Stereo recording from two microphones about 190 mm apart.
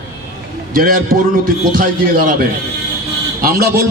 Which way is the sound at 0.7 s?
50° right (ahead or behind).